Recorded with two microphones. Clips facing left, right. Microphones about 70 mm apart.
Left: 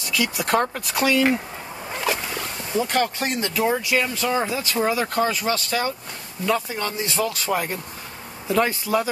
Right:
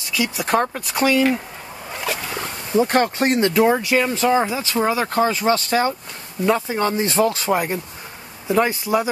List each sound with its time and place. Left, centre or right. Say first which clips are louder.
0.1 s speech: right 2 dB; centre
2.4 s speech: right 8 dB; right